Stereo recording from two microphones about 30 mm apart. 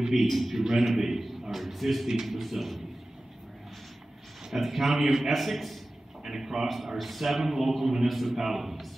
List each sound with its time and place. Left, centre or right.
0.0 s a man's voice: centre
0.7 s a man's voice: centre
4.5 s a man's voice: centre
6.2 s speech: centre
6.9 s speech: centre
8.1 s a man's voice: centre